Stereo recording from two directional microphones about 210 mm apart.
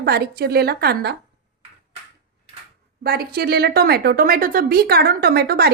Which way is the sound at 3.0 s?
50° right (ahead or behind).